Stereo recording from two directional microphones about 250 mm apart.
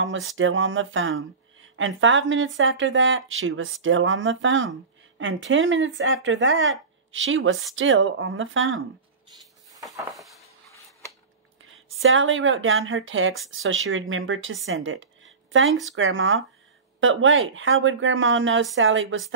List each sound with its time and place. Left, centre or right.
0.4 s speech: right
11.6 s speech: right